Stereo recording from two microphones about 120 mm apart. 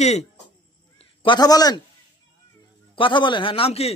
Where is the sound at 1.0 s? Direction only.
55° left (ahead or behind).